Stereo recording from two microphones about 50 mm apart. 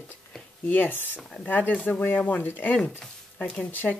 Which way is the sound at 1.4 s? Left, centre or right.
Left.